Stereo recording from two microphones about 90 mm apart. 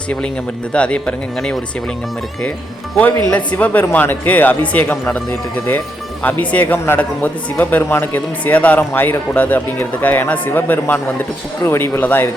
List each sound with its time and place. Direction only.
0.7 s speech: 10° left (ahead or behind)
3.2 s speech: 15° left (ahead or behind)
6.2 s speech: 15° left (ahead or behind)